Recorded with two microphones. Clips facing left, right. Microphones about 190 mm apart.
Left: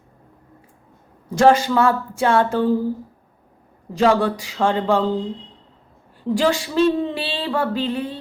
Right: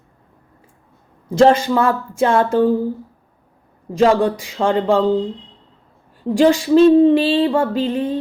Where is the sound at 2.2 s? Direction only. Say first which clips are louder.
Right 3 dB; 20° right (ahead or behind).